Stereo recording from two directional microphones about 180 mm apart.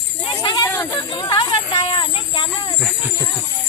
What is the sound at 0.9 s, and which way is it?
Speech, 25° left (ahead or behind).